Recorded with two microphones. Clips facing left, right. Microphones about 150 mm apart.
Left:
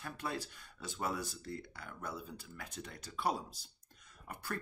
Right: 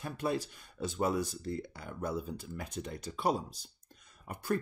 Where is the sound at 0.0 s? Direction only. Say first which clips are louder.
Right 7 dB; 20° right (ahead or behind).